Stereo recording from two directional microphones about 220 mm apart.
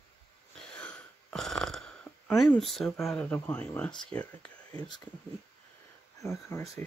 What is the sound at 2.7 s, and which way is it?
Speech, centre (ahead or behind).